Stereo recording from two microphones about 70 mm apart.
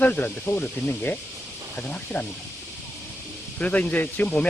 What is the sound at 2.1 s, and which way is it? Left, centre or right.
Speech, left.